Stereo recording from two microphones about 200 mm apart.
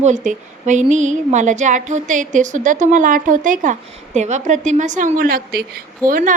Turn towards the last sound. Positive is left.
turn(degrees=-45)  # may be behind; listen again after turning